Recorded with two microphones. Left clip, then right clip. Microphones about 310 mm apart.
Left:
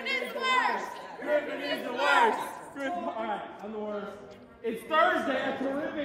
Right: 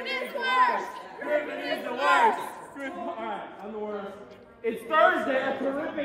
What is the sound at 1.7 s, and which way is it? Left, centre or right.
Speech, centre.